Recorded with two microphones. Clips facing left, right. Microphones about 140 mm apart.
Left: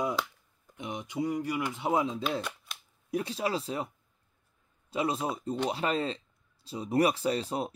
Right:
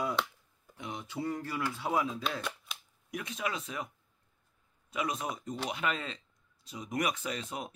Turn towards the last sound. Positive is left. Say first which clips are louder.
# left 8 dB
turn(degrees=35)  # may be behind; listen again after turning